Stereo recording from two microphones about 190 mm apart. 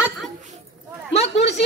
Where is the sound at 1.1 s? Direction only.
35° left (ahead or behind).